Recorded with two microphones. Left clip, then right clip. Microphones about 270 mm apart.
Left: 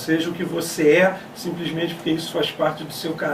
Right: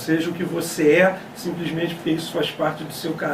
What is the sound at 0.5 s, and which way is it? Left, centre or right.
Speech, centre.